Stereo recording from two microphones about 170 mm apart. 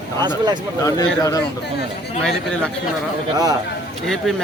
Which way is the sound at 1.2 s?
20° left (ahead or behind).